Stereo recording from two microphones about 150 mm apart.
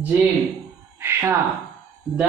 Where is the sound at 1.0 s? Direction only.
15° right (ahead or behind).